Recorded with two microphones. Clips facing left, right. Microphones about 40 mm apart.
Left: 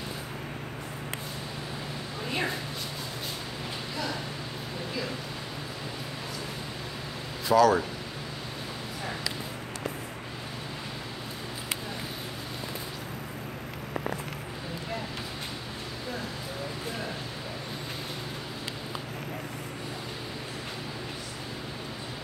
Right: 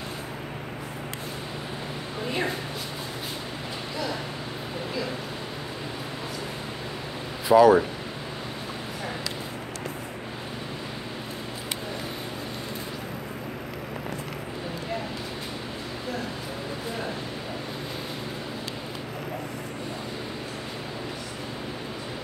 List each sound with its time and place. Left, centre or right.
7.4 s speech: centre